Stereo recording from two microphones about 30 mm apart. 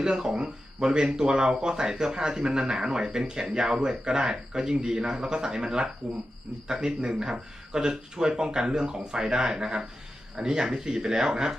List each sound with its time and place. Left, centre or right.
0.0 s speech: right